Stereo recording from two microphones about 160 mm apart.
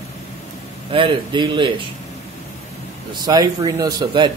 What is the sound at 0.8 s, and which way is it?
Speech, 35° right (ahead or behind).